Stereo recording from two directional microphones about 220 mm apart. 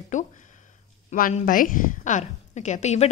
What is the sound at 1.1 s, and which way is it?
A woman's voice, 40° left (ahead or behind).